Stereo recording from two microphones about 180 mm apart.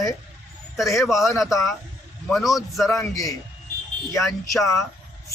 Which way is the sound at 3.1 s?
20° left (ahead or behind).